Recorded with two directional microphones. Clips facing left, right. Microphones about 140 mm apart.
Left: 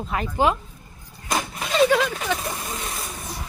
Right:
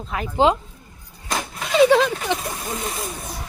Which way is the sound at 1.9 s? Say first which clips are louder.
Right 4 dB; 25° right (ahead or behind).